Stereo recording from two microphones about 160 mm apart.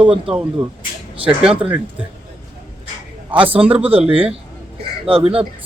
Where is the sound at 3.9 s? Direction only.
35° right (ahead or behind).